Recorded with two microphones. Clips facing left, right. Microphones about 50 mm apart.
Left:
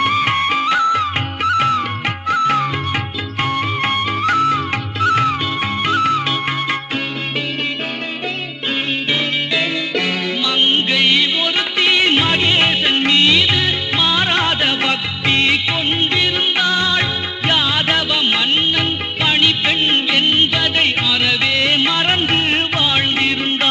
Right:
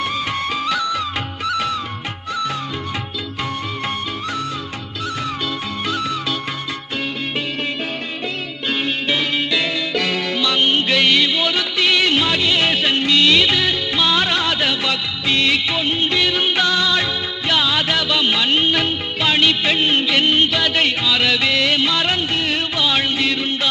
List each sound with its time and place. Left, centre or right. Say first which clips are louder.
0.0 s music: left 6 dB; left
0.7 s music of bollywood: left 6 dB; left
2.3 s music: left 8 dB; left
3.9 s music: left 8 dB; left
5.8 s music: left 7 dB; left
9.6 s music: left 1 dB; left
11.5 s music: left 2 dB; left
12.6 s music of bollywood: left 2 dB; centre
14.3 s music: left 2 dB; left
16.1 s music of bollywood: left 1 dB; centre
18.1 s music: left 1 dB; centre
19.2 s music of bollywood: left 1 dB; centre
21.6 s music of bollywood: left 2 dB; left
23.1 s music: left 2 dB; left